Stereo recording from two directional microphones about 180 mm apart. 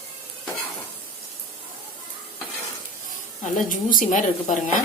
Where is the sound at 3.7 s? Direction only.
50° left (ahead or behind).